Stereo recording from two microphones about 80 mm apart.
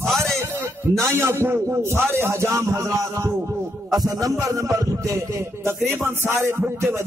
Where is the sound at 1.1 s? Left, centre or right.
Right.